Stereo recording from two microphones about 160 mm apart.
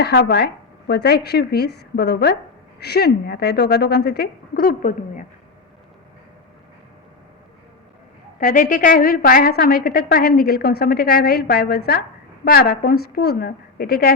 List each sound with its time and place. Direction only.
0.0 s speech: 90° left; by 5.2 s 55° left (ahead or behind)
8.4 s a woman's voice: 55° left (ahead or behind)